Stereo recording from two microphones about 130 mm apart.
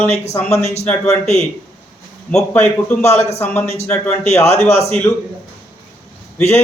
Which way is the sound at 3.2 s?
55° left (ahead or behind).